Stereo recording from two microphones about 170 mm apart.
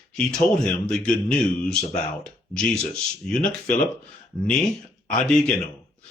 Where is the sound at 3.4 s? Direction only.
50° left (ahead or behind).